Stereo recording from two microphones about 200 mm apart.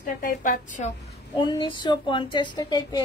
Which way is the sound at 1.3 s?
25° left (ahead or behind).